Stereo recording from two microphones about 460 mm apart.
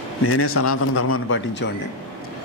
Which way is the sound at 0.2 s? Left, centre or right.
Left.